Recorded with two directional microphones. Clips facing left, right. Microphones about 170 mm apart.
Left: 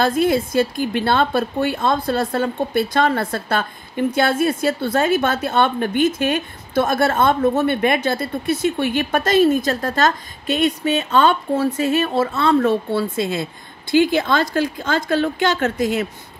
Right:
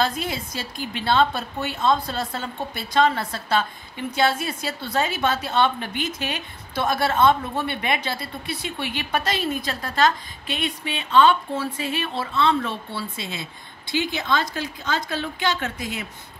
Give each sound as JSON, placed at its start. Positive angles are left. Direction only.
{"t": 0.0, "sound": "a woman's voice", "side_deg": 50}